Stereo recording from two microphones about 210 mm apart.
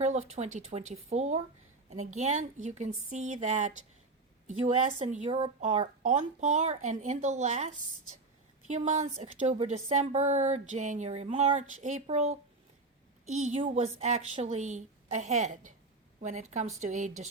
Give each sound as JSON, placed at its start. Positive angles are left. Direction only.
{"t": 0.0, "sound": "a woman's voice", "side_deg": -35}
{"t": 13.4, "sound": "a woman's voice", "side_deg": -35}